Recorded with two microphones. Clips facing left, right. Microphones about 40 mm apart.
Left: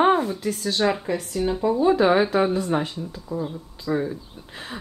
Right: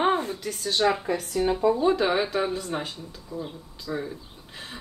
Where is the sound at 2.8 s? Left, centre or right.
Left.